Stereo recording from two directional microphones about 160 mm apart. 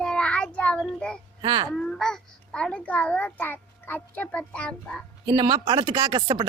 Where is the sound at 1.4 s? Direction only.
25° right (ahead or behind).